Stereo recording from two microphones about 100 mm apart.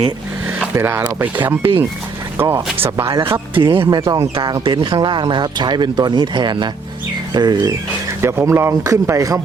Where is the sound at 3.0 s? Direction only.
60° right (ahead or behind).